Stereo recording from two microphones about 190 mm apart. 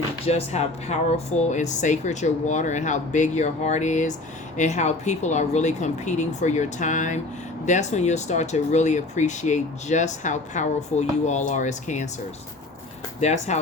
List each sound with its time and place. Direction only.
0.3 s speech: 35° left (ahead or behind)
13.1 s speech: 40° left (ahead or behind)